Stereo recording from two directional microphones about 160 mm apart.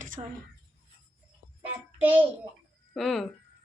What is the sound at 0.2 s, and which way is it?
Speech, 30° right (ahead or behind).